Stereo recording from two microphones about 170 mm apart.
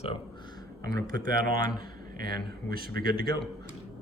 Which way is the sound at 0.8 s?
20° left (ahead or behind).